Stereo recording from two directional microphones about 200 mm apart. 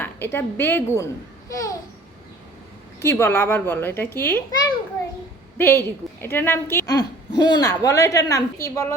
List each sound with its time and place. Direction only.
0.0 s a child's voice: 10° left (ahead or behind)
3.0 s a woman's voice: 10° left (ahead or behind)
5.5 s a woman's voice: 10° left (ahead or behind)